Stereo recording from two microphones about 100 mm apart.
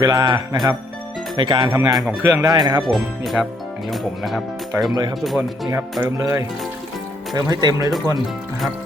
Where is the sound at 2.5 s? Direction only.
40° right (ahead or behind).